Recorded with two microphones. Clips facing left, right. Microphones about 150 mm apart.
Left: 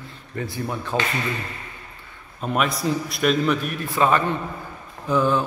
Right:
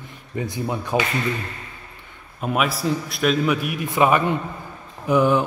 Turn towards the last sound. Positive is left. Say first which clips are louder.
# right 3 dB
turn(degrees=-15)  # may be behind; listen again after turning